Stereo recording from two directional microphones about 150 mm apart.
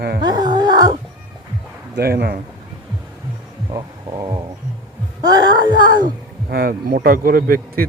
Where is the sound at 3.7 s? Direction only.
25° right (ahead or behind).